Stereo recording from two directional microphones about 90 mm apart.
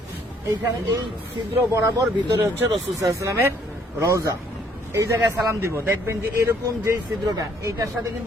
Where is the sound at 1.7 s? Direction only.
30° right (ahead or behind).